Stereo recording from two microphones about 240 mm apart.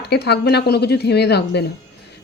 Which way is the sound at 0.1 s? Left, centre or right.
Left.